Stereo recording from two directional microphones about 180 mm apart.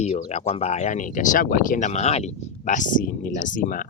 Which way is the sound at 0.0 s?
40° left (ahead or behind).